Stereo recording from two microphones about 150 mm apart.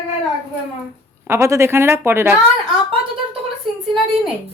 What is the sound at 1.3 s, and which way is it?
A woman's voice, 20° right (ahead or behind).